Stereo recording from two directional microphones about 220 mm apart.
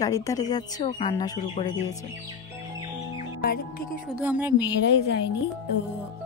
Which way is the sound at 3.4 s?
40° left (ahead or behind).